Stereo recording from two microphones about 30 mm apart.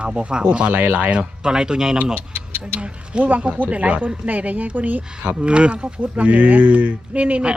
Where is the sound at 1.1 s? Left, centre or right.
Right.